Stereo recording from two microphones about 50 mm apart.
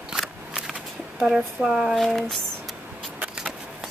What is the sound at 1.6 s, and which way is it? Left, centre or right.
Speech, centre.